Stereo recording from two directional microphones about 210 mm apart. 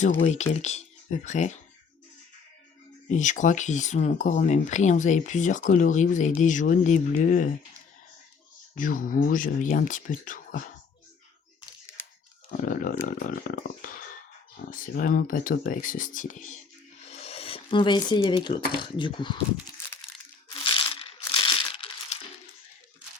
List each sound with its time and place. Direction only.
0.0 s speech: 35° left (ahead or behind)
3.1 s speech: 35° left (ahead or behind)
8.7 s speech: 40° left (ahead or behind)
12.5 s speech: 40° left (ahead or behind); by 19.4 s 25° left (ahead or behind)
20.5 s crumpling: 25° left (ahead or behind)